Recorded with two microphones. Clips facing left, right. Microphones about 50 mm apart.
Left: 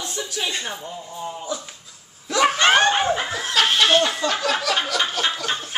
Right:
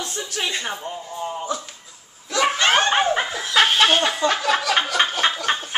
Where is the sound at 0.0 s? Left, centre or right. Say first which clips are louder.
Right 1 dB; right.